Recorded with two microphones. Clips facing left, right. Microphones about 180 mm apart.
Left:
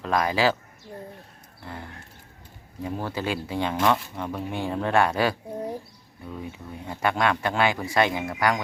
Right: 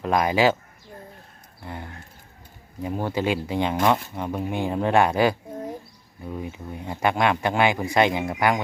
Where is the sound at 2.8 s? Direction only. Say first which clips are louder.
Right 4 dB; 15° right (ahead or behind).